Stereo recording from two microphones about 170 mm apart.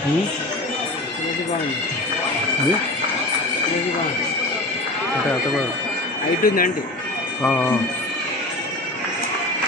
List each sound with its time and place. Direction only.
6.4 s a man's voice: 60° left (ahead or behind)
7.4 s speech: 10° left (ahead or behind)